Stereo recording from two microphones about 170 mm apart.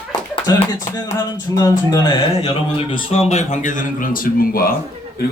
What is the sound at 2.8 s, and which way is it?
A man's voice, 30° left (ahead or behind).